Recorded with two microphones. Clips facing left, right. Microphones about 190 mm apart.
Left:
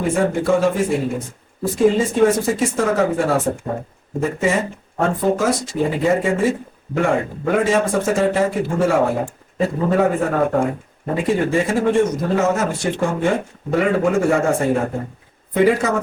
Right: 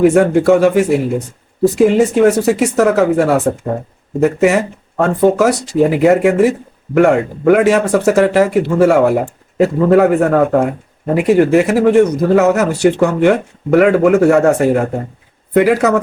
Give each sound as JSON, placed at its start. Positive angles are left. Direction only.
{"t": 0.0, "sound": "speech", "side_deg": -75}